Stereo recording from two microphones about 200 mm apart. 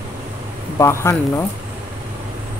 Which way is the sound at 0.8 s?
15° left (ahead or behind).